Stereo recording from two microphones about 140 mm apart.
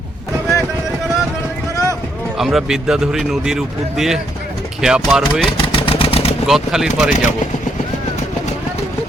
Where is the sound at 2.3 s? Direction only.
Centre (ahead or behind).